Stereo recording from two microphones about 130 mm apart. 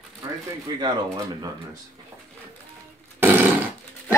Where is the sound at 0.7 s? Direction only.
30° right (ahead or behind).